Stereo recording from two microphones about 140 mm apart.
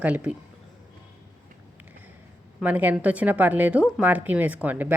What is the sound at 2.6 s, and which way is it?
A woman's voice, 10° right (ahead or behind).